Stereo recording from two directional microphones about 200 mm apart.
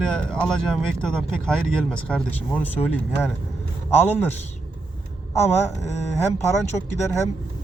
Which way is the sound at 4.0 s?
10° left (ahead or behind).